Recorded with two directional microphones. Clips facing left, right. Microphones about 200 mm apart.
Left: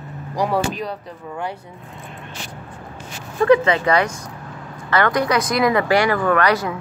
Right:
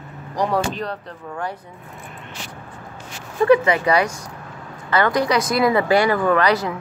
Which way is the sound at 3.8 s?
15° right (ahead or behind).